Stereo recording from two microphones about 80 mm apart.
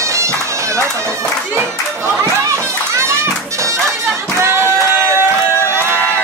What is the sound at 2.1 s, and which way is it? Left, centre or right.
Children playing, right.